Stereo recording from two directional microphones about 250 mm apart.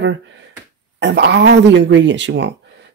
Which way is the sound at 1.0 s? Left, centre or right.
Right.